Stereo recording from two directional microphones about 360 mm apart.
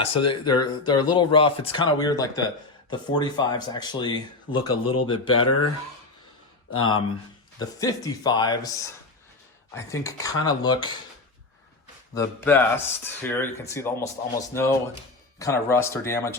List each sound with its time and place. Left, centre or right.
0.3 s speech: centre
5.2 s speech: left
7.6 s speech: centre
12.1 s speech: centre